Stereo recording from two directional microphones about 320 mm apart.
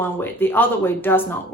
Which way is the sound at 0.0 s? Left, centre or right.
Centre.